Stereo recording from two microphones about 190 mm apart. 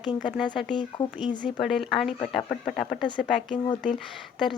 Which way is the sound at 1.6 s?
Centre (ahead or behind).